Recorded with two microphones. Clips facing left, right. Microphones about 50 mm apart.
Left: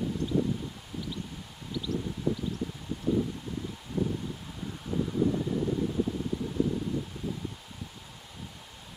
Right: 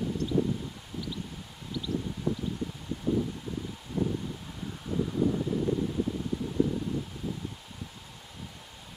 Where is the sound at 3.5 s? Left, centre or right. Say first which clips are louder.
Even; centre.